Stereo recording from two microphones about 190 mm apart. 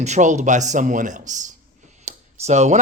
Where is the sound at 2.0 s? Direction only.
35° right (ahead or behind).